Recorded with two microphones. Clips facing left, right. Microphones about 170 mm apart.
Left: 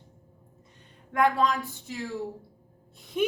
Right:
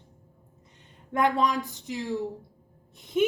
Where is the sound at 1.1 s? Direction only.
20° right (ahead or behind).